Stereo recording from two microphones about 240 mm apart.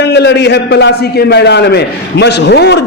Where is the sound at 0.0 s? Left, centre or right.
Left.